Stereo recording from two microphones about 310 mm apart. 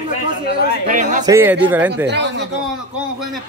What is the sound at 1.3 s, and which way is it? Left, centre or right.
Speech, centre.